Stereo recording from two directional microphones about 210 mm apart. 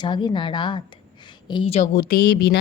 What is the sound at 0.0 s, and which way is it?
A woman's voice, 20° left (ahead or behind).